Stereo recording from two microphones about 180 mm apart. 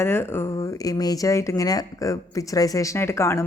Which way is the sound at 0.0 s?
15° left (ahead or behind).